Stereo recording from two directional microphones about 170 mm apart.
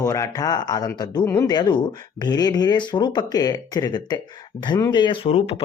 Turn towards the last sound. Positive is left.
turn(degrees=35)  # may be behind; listen again after turning